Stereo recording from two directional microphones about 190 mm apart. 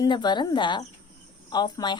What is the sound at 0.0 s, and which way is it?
A woman's voice, 25° left (ahead or behind).